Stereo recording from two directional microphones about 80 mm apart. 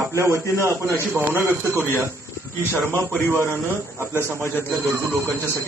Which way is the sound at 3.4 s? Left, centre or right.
Right.